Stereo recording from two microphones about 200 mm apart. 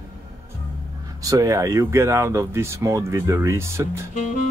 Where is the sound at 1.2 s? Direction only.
15° right (ahead or behind).